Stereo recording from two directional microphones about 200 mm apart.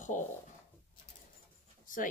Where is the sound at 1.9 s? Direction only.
40° left (ahead or behind).